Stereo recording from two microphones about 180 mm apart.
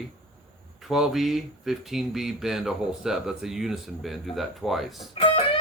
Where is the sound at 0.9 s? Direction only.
Centre (ahead or behind).